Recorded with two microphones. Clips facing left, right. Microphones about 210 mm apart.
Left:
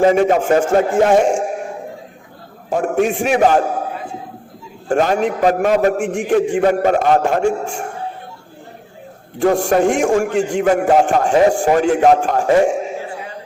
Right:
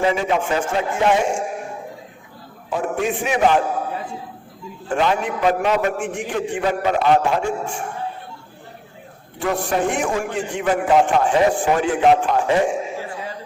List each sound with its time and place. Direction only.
0.0 s a man's voice: 45° left (ahead or behind)
2.6 s a man's voice: 45° left (ahead or behind)
4.9 s a man's voice: 45° left (ahead or behind)
9.4 s a man's voice: 45° left (ahead or behind)